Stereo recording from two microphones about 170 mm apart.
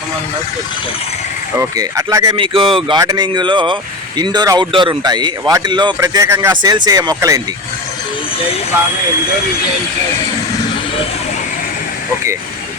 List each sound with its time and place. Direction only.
1.5 s speech: 20° right (ahead or behind)
2.3 s speech: 30° right (ahead or behind)